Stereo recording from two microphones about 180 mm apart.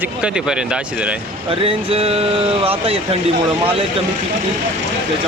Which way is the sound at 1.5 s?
30° right (ahead or behind).